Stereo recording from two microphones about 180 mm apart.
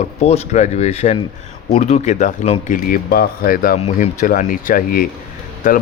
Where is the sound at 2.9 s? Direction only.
50° left (ahead or behind).